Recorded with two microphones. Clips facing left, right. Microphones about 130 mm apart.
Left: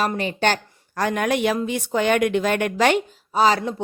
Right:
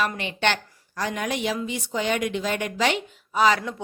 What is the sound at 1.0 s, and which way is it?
Speech, 55° left (ahead or behind).